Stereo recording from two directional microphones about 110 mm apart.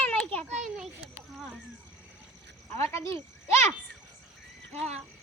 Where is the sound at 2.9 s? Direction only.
25° left (ahead or behind).